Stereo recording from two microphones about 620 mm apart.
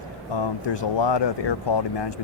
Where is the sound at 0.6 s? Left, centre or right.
Left.